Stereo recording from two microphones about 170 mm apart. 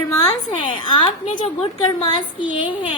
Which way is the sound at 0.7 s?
30° left (ahead or behind).